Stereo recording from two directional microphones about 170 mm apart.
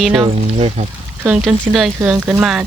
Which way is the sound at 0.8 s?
40° right (ahead or behind).